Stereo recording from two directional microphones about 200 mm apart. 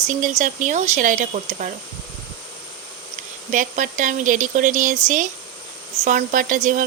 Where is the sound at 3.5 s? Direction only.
40° right (ahead or behind).